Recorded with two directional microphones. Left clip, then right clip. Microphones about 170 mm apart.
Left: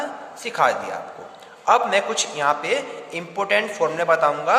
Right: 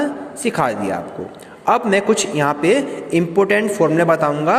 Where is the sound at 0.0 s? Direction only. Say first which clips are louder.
Right 8 dB; 25° right (ahead or behind).